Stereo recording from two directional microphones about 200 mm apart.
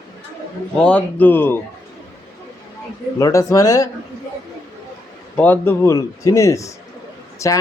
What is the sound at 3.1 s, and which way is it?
Speech, 15° left (ahead or behind).